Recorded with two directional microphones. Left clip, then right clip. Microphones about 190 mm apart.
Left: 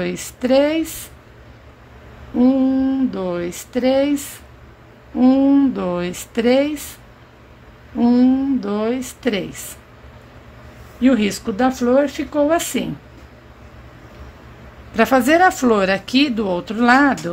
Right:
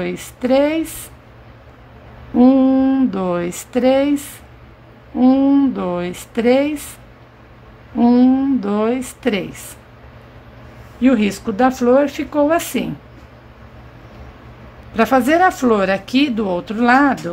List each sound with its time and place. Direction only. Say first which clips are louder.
0.0 s speech: even; 5° left (ahead or behind)
2.3 s speech: right 4 dB; 25° right (ahead or behind); by 6.9 s centre (ahead or behind)
7.9 s a woman's voice: right 2 dB; 10° right (ahead or behind)
11.0 s speech: right 1 dB; centre (ahead or behind)
15.0 s speech: even; 5° left (ahead or behind)